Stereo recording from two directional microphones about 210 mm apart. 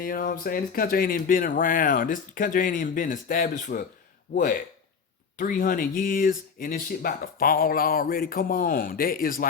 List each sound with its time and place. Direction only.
0.0 s speech: 40° left (ahead or behind)
5.4 s speech: 40° left (ahead or behind)